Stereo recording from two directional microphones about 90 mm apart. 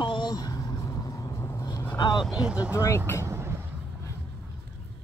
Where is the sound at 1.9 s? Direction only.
55° left (ahead or behind).